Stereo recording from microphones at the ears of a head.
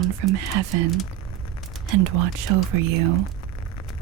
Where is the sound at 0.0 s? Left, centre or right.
Right.